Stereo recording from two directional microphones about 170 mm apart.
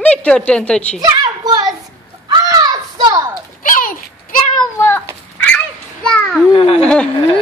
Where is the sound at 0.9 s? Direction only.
25° right (ahead or behind).